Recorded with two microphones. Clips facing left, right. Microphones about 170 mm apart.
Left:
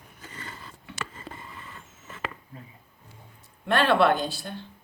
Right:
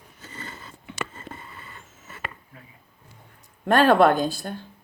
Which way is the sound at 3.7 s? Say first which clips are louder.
Right 4 dB; 45° right (ahead or behind).